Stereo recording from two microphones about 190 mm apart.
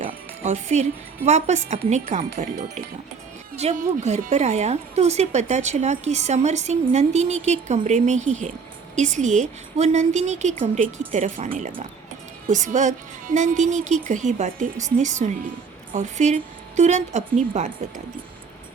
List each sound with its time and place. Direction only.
0.0 s a woman's voice: 35° right (ahead or behind)